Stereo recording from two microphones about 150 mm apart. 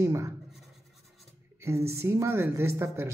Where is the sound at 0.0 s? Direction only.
20° right (ahead or behind).